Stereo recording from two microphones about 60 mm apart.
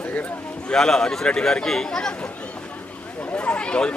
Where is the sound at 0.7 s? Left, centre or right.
Centre.